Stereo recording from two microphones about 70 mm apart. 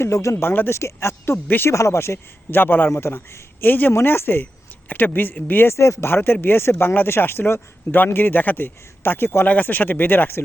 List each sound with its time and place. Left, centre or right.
0.0 s speech: left
0.4 s a man's voice: left
0.8 s a man's voice: left
1.7 s a man's voice: left